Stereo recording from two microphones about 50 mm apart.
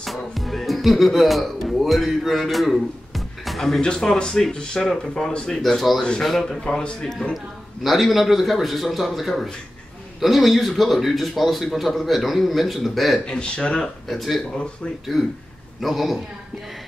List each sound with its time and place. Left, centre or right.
0.0 s speech: centre
3.8 s speech: centre
7.8 s speech: centre
13.3 s speech: centre
14.0 s speech: centre